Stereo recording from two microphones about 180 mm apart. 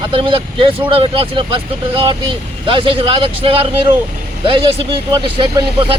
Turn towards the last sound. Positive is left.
turn(degrees=-30)  # may be behind; listen again after turning